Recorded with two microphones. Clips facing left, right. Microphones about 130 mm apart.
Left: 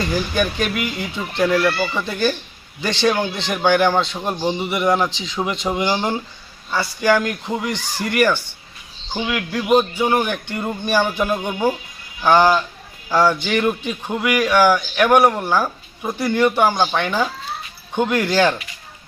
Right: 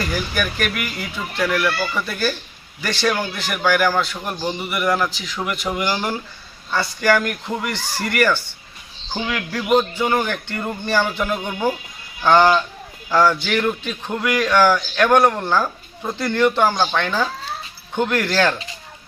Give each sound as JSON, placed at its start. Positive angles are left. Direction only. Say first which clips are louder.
{"t": 0.0, "sound": "a man's voice", "louder": "left 3 dB", "side_deg": 25}